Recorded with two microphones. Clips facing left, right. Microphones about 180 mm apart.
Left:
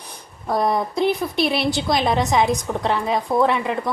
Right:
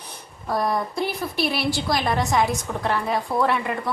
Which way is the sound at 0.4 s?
20° left (ahead or behind).